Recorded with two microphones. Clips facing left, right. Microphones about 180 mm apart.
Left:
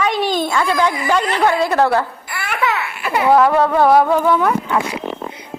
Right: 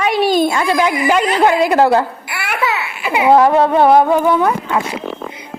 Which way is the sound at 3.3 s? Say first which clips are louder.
Right 3 dB; 20° right (ahead or behind).